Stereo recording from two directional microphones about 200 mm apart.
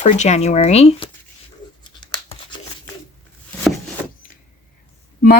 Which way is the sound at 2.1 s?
20° left (ahead or behind).